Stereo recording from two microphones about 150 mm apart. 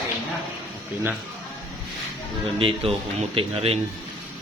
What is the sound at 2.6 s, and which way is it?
Speech, 40° right (ahead or behind).